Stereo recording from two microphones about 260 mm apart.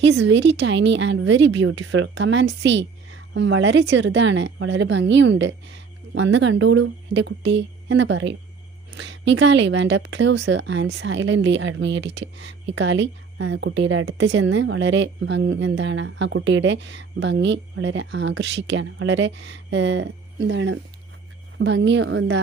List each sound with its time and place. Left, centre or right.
0.0 s speech: right